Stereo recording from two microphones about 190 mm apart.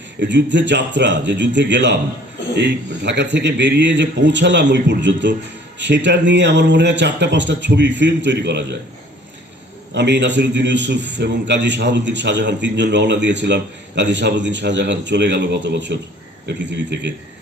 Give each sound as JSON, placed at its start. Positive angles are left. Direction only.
{"t": 0.2, "sound": "a man's voice", "side_deg": -70}
{"t": 9.9, "sound": "a man's voice", "side_deg": -65}